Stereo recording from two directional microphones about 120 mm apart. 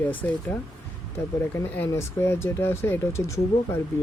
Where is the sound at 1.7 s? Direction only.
20° left (ahead or behind).